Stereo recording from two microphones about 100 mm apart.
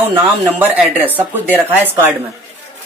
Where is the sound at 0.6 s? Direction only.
15° right (ahead or behind).